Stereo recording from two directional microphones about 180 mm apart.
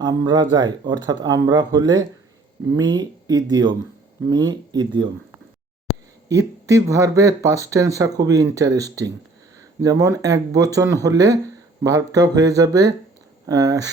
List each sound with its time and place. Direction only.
0.0 s speech: 20° right (ahead or behind)
6.2 s speech: 20° right (ahead or behind)